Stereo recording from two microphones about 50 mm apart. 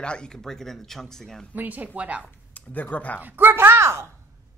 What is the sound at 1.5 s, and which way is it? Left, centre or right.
Speech, right.